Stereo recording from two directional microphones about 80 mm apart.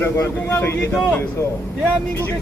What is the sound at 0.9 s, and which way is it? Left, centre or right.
Speech, centre.